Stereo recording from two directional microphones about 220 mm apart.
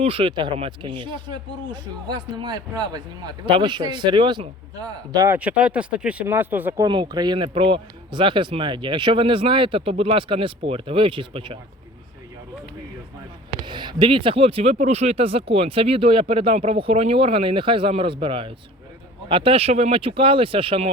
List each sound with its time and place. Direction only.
0.0 s a man's voice: 25° right (ahead or behind); by 6.8 s 10° right (ahead or behind)
6.8 s speech: 20° right (ahead or behind)
13.7 s speech: 20° right (ahead or behind)